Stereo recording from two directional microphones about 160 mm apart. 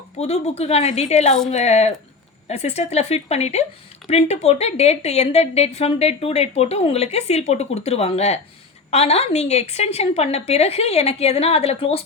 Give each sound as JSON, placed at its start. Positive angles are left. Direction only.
{"t": 0.2, "sound": "a woman's voice", "side_deg": 40}